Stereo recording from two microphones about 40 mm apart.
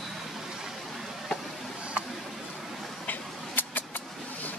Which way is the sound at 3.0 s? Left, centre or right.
Left.